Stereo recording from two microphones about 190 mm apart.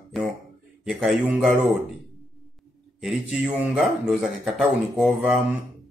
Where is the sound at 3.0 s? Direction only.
Centre (ahead or behind).